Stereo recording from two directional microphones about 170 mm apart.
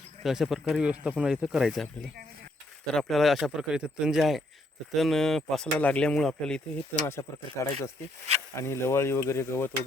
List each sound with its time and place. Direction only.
0.2 s speech: centre (ahead or behind)
7.1 s speech: 15° left (ahead or behind)